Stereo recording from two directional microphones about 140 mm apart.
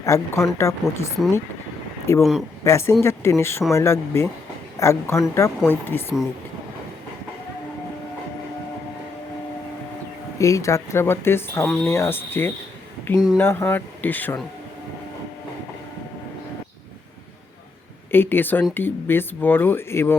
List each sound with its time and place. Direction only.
0.0 s speech: 20° left (ahead or behind)
10.3 s speech: 20° left (ahead or behind)
11.6 s speech: 5° left (ahead or behind)
11.9 s speech: 15° left (ahead or behind)
18.1 s speech: 15° left (ahead or behind)